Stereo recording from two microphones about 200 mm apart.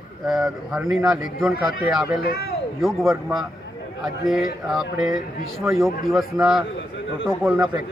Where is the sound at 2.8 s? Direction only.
Centre (ahead or behind).